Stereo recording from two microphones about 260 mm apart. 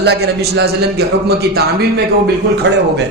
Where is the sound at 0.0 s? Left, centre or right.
Right.